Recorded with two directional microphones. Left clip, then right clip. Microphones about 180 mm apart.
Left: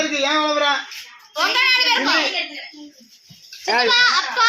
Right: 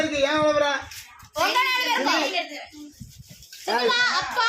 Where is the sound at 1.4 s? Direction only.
70° right (ahead or behind).